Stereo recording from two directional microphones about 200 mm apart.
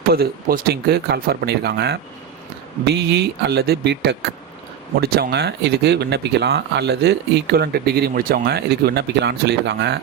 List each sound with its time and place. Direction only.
0.1 s speech: 50° right (ahead or behind)